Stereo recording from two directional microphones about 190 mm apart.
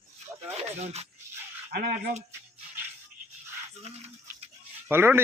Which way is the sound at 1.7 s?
50° right (ahead or behind).